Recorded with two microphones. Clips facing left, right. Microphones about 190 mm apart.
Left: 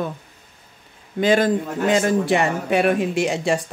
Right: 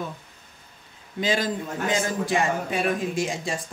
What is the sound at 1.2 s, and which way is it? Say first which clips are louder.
A man's voice: left 8 dB; 55° left (ahead or behind).